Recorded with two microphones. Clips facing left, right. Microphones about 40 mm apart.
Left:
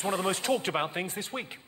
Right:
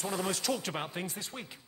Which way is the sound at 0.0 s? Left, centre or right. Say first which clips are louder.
Left 4 dB; left.